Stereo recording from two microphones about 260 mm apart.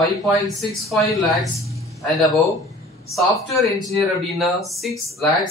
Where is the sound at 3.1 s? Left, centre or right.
Centre.